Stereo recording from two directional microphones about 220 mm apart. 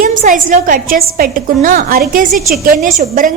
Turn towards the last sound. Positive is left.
turn(degrees=-35)  # may be behind; listen again after turning